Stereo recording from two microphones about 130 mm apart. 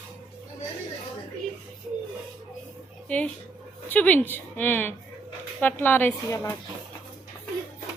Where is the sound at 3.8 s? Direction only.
10° left (ahead or behind).